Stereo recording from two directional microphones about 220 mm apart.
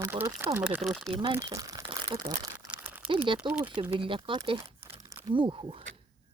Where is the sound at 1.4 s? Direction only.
15° right (ahead or behind).